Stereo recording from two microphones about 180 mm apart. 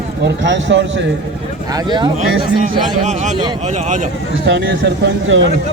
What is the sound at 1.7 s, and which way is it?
Speech, 25° right (ahead or behind).